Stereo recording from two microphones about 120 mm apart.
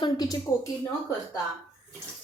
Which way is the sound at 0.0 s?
35° left (ahead or behind).